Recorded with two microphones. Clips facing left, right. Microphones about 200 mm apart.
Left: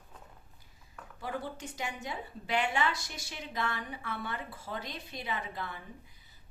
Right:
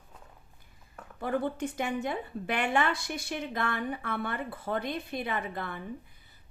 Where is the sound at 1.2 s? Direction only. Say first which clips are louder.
Right 8 dB; 55° right (ahead or behind).